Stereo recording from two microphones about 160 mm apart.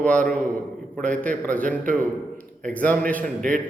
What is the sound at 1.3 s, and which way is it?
Speech, 55° right (ahead or behind).